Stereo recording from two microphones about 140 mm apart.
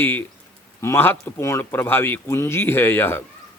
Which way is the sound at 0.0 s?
15° left (ahead or behind).